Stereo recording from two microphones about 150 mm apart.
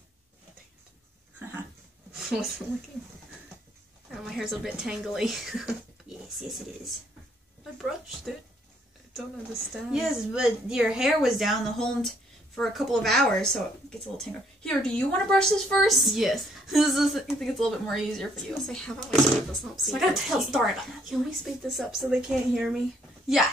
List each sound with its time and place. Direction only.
2.1 s speech: centre (ahead or behind)
4.1 s speech: centre (ahead or behind)
9.1 s a woman's voice: centre (ahead or behind)